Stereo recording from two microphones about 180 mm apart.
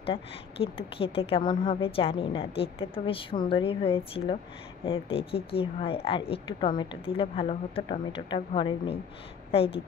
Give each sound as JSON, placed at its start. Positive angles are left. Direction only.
{"t": 0.0, "sound": "a woman's voice", "side_deg": 30}